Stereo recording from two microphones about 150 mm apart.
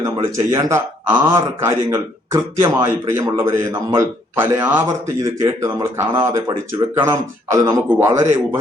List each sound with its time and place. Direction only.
0.3 s a man's voice: 20° right (ahead or behind)